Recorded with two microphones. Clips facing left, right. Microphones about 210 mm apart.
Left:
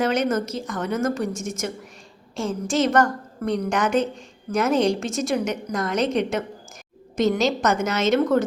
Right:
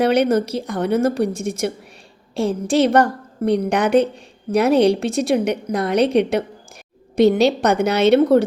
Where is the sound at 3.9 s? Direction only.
60° right (ahead or behind).